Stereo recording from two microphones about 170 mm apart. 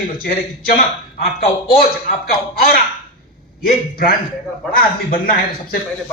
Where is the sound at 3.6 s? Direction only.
60° left (ahead or behind).